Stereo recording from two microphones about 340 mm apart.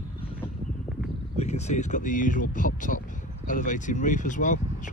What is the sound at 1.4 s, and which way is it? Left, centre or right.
Speech, centre.